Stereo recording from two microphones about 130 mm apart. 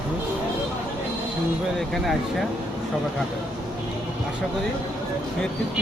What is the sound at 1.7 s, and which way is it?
Speech, centre (ahead or behind).